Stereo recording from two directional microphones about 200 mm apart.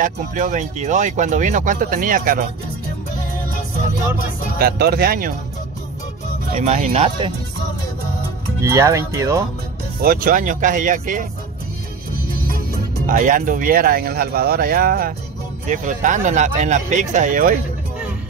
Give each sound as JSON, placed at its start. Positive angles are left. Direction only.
{"t": 0.0, "sound": "speech", "side_deg": -40}
{"t": 4.6, "sound": "speech", "side_deg": -50}
{"t": 6.5, "sound": "speech", "side_deg": -35}
{"t": 8.6, "sound": "speech", "side_deg": -15}
{"t": 10.0, "sound": "speech", "side_deg": -45}
{"t": 12.4, "sound": "speech", "side_deg": -45}